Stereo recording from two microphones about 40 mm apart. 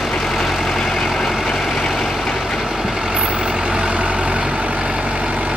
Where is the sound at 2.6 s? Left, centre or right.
Centre.